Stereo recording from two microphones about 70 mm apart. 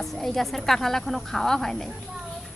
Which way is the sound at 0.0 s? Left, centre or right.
Centre.